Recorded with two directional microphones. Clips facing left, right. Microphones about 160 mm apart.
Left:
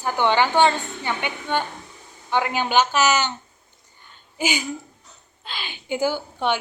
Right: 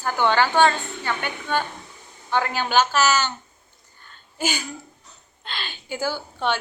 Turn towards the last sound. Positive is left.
turn(degrees=15)  # may be behind; listen again after turning